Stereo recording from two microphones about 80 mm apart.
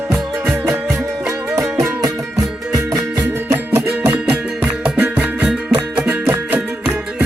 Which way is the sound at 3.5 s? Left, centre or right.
Right.